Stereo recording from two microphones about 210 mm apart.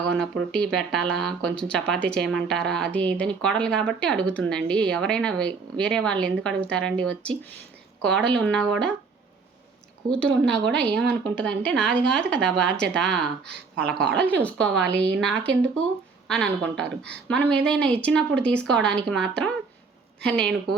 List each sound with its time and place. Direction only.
0.2 s speech: centre (ahead or behind)
10.1 s speech: 5° left (ahead or behind)
14.8 s a woman's voice: 55° right (ahead or behind)
16.3 s speech: 5° left (ahead or behind)